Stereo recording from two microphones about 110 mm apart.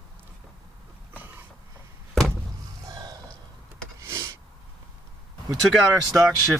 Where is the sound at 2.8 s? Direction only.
35° right (ahead or behind).